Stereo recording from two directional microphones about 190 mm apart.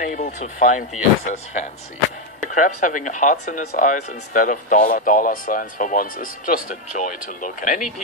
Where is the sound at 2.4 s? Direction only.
40° left (ahead or behind).